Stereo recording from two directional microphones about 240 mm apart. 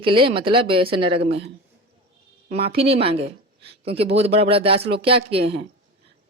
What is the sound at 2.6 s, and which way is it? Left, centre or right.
Speech, right.